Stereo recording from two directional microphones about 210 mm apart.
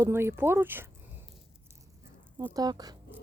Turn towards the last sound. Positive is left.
turn(degrees=-20)  # may be behind; listen again after turning